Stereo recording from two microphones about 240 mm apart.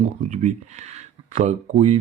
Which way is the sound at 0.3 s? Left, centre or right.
Right.